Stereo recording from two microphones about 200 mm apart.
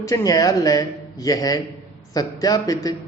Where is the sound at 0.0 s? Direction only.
15° left (ahead or behind).